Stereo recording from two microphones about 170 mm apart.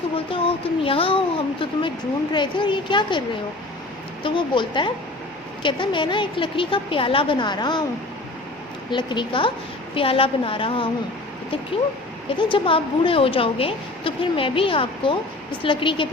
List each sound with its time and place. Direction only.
0.3 s a woman's voice: 30° left (ahead or behind)
8.9 s a woman's voice: 25° left (ahead or behind)
12.4 s a woman's voice: 30° left (ahead or behind)